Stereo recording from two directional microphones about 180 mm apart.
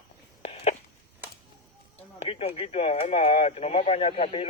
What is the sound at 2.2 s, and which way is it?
Speech, 35° left (ahead or behind).